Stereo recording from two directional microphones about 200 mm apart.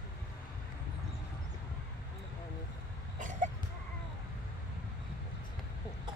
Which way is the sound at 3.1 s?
40° right (ahead or behind).